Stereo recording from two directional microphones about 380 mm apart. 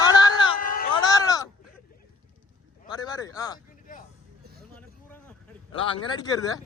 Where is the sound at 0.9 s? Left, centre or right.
Centre.